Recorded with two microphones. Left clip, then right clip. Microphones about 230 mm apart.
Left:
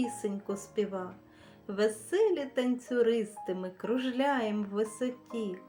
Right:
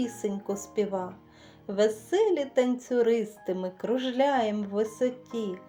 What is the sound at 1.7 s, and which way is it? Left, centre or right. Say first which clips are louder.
Speech: right 5 dB; centre.